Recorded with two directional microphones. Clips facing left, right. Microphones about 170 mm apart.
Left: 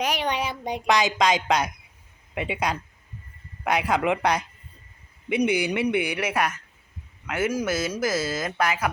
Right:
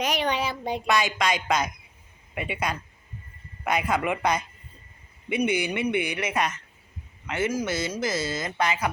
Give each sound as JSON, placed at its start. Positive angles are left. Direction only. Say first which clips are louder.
{"t": 0.0, "sound": "a woman's voice", "louder": "even", "side_deg": 10}
{"t": 1.2, "sound": "a man's voice", "louder": "left 3 dB", "side_deg": 85}
{"t": 3.8, "sound": "speech", "louder": "left 1 dB", "side_deg": 15}
{"t": 4.0, "sound": "speech", "louder": "left 2 dB", "side_deg": 85}
{"t": 5.4, "sound": "speech", "louder": "left 2 dB", "side_deg": 10}